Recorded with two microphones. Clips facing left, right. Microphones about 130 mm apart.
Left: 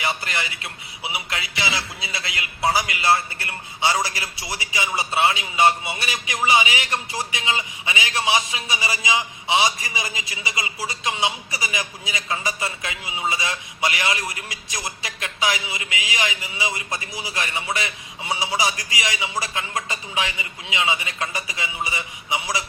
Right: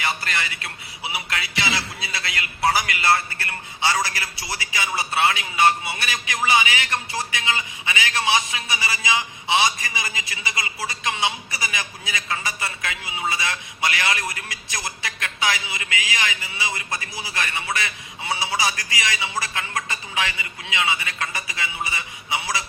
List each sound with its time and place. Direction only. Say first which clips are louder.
0.0 s a man's voice: even; 20° left (ahead or behind)